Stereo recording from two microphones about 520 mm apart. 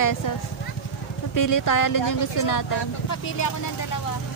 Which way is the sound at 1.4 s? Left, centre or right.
Left.